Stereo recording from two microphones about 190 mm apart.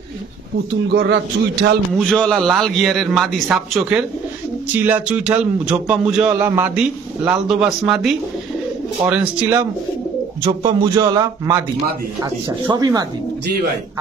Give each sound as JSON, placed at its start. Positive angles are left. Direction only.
{"t": 0.8, "sound": "a man's voice", "side_deg": -65}
{"t": 2.0, "sound": "a man's voice", "side_deg": 5}
{"t": 10.4, "sound": "speech", "side_deg": -20}